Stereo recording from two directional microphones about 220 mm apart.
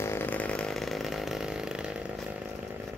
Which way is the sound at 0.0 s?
10° left (ahead or behind).